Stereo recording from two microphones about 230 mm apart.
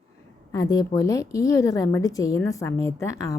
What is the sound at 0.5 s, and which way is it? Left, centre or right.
Speech, centre.